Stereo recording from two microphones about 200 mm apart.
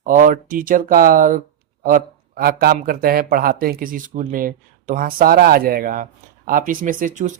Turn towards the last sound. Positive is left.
turn(degrees=-40)  # may be behind; listen again after turning